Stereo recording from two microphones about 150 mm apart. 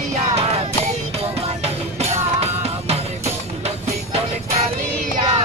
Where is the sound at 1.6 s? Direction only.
45° right (ahead or behind).